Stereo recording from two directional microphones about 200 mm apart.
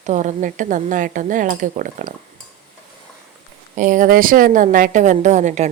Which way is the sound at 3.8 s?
40° right (ahead or behind).